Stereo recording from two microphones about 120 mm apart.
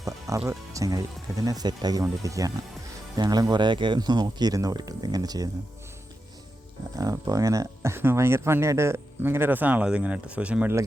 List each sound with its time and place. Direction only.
0.0 s speech: 25° right (ahead or behind)
6.9 s speech: 30° right (ahead or behind); by 10.8 s 10° right (ahead or behind)